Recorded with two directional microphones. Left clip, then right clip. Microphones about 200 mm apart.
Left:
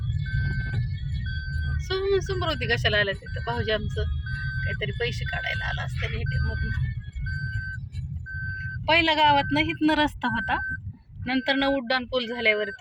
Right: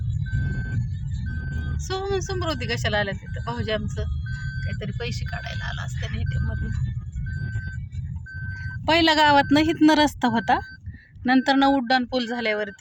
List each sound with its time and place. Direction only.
1.9 s speech: 15° right (ahead or behind)
8.9 s speech: 30° right (ahead or behind)
11.3 s speech: 25° right (ahead or behind)